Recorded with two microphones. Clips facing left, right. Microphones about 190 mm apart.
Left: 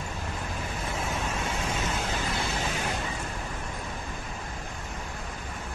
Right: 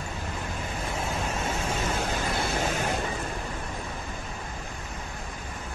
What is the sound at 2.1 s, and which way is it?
Vehicle, 50° right (ahead or behind).